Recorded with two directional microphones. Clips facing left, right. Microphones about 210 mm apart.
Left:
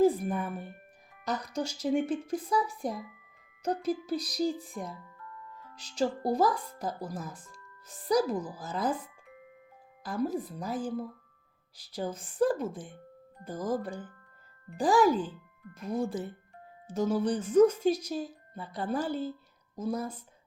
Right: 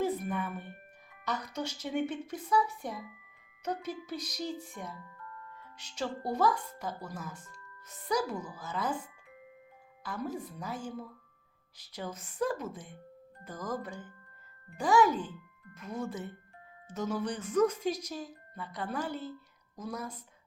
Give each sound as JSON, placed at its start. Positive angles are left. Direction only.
{"t": 0.0, "sound": "a sound", "side_deg": 35}
{"t": 1.3, "sound": "speech", "side_deg": 35}
{"t": 10.0, "sound": "speech", "side_deg": 35}